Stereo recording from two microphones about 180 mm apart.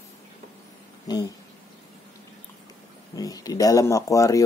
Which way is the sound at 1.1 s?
20° left (ahead or behind).